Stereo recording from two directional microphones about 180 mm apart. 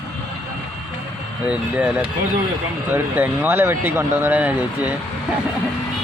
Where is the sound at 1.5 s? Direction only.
5° right (ahead or behind).